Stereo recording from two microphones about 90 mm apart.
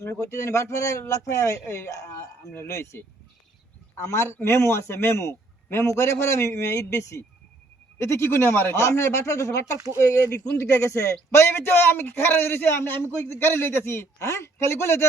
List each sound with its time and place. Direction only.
0.0 s a man's voice: 30° left (ahead or behind)
9.7 s speech: 40° right (ahead or behind)
10.0 s a man's voice: 35° left (ahead or behind)